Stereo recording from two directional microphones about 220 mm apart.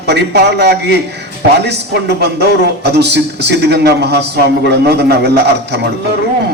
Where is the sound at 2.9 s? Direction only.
50° right (ahead or behind).